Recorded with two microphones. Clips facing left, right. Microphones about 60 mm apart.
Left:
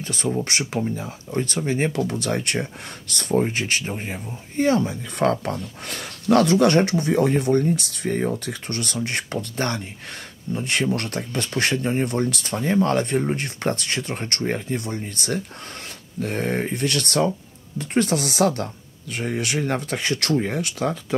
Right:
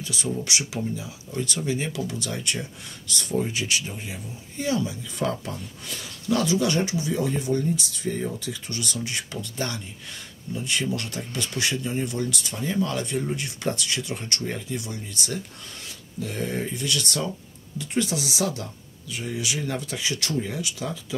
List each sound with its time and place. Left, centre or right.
0.0 s speech: left